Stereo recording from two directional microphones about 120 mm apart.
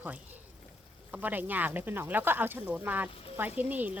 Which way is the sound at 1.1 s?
15° right (ahead or behind).